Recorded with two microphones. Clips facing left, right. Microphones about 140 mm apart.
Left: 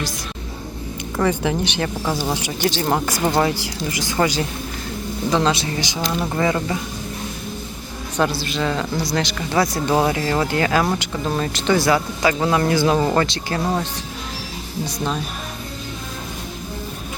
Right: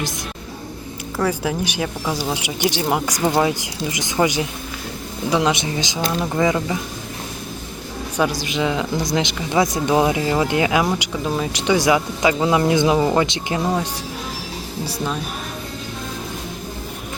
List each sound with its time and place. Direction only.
1.1 s speech: 5° right (ahead or behind)
2.3 s speech: 15° right (ahead or behind)
6.1 s speech: centre (ahead or behind)
6.4 s speech: 10° right (ahead or behind)
8.1 s speech: 10° right (ahead or behind)
14.8 s speech: 10° right (ahead or behind)